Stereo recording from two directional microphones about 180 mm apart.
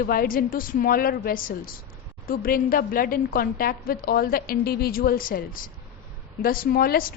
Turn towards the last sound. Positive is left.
turn(degrees=55)  # may be behind; listen again after turning